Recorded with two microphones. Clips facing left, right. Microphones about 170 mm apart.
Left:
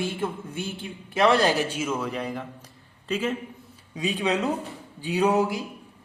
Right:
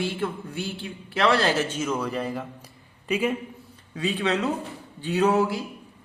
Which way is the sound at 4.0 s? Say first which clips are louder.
Even; 15° left (ahead or behind).